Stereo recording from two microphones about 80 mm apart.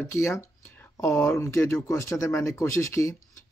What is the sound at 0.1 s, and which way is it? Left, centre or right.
Speech, left.